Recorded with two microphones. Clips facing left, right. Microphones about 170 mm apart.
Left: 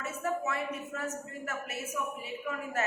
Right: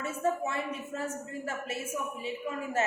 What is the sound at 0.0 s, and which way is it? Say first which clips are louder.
A woman's voice: right 3 dB; 30° right (ahead or behind).